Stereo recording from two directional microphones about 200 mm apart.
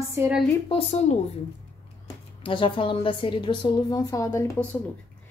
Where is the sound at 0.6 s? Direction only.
30° left (ahead or behind).